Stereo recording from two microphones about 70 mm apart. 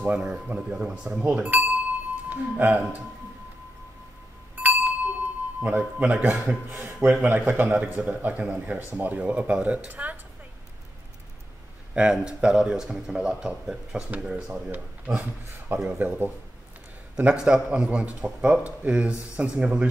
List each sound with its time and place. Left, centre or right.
0.0 s speech: centre
1.2 s speech: right
4.6 s wind chime: right
5.6 s speech: right
6.7 s speech: right
7.7 s speech: centre
11.9 s speech: centre
15.7 s speech: right
17.2 s speech: centre